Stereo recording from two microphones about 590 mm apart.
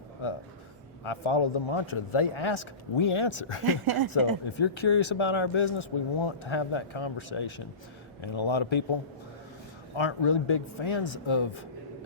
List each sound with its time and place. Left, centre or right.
1.0 s speech: left
3.7 s a woman's voice: right
4.5 s speech: left
9.9 s speech: left